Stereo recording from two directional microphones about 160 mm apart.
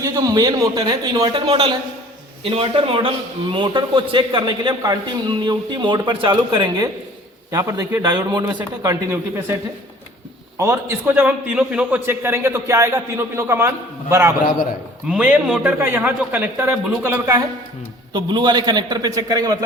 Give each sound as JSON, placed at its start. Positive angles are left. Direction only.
{"t": 0.0, "sound": "a man's voice", "side_deg": -20}
{"t": 10.6, "sound": "a man's voice", "side_deg": -15}
{"t": 15.0, "sound": "a man's voice", "side_deg": -5}
{"t": 18.1, "sound": "a man's voice", "side_deg": -30}